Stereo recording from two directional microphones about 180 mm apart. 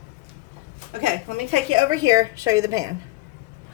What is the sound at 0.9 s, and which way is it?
Speech, 45° right (ahead or behind).